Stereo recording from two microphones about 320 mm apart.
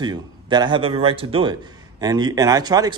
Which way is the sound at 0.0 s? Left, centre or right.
Centre.